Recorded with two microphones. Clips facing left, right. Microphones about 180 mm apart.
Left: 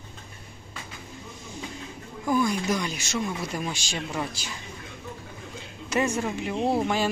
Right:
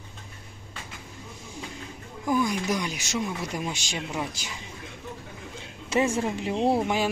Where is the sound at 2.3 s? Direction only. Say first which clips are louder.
Left 1 dB; 15° right (ahead or behind).